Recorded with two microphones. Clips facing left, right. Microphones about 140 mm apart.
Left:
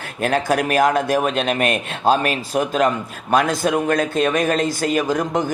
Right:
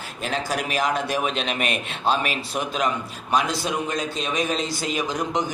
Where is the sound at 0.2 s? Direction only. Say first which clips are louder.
Left 8 dB; 55° left (ahead or behind).